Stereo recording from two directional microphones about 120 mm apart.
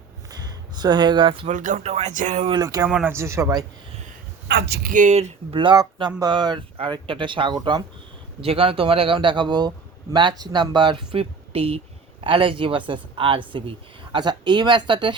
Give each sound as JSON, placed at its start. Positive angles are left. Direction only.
{"t": 0.3, "sound": "a sound", "side_deg": -35}
{"t": 1.5, "sound": "speech", "side_deg": -90}
{"t": 2.5, "sound": "speech", "side_deg": -30}
{"t": 2.8, "sound": "speech", "side_deg": -15}
{"t": 4.9, "sound": "speech", "side_deg": -80}
{"t": 5.5, "sound": "speech", "side_deg": -35}
{"t": 8.4, "sound": "speech", "side_deg": -50}